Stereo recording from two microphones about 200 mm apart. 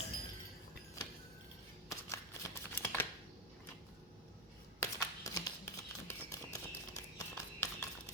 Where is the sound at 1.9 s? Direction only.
15° left (ahead or behind).